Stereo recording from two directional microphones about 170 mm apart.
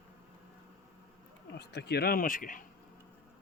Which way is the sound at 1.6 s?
75° left (ahead or behind).